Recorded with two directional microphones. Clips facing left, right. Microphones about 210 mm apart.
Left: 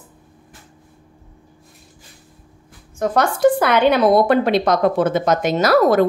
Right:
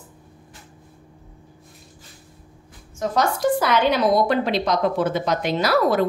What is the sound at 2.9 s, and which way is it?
A woman's voice, 55° left (ahead or behind).